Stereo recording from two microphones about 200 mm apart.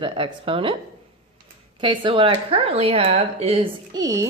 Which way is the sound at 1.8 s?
25° right (ahead or behind).